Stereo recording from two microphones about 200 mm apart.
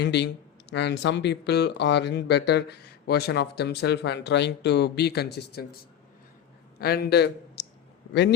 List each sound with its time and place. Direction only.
0.0 s speech: 60° left (ahead or behind)
6.7 s a man's voice: 50° left (ahead or behind)